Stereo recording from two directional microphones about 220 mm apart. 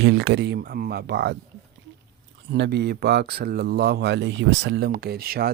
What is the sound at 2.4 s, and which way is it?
Speech, 50° right (ahead or behind).